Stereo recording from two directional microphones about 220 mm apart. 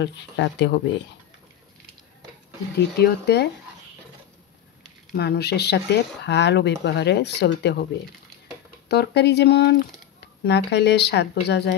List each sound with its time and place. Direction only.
0.0 s speech: 55° left (ahead or behind)
3.0 s speech: 50° left (ahead or behind)
5.1 s speech: 45° left (ahead or behind)
8.8 s speech: 50° left (ahead or behind)